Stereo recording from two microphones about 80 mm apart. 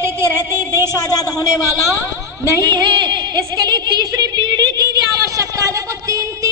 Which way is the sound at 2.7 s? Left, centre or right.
Right.